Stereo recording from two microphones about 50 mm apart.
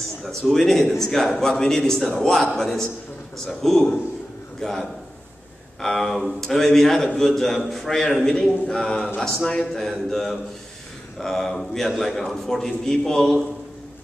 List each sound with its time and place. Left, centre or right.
0.5 s a man's voice: centre